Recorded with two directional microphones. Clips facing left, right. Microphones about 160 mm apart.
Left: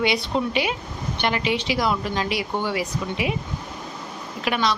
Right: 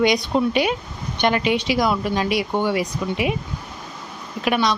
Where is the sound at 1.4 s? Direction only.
15° right (ahead or behind).